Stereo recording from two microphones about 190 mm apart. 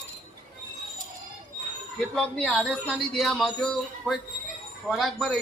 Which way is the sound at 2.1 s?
5° left (ahead or behind).